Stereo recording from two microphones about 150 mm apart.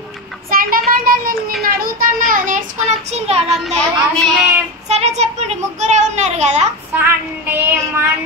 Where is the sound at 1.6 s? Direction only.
75° right (ahead or behind).